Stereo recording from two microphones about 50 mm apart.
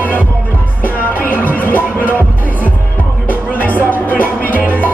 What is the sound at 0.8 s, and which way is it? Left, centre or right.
Music, left.